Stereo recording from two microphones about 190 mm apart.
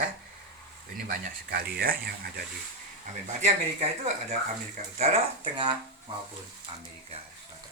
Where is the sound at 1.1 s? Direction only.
50° right (ahead or behind).